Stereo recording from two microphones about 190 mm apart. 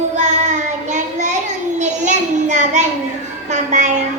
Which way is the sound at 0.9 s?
40° right (ahead or behind).